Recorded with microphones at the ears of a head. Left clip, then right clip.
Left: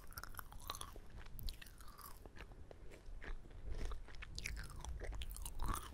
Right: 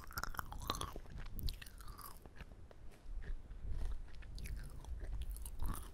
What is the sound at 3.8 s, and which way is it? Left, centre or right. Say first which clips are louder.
Chewing: left 6 dB; left.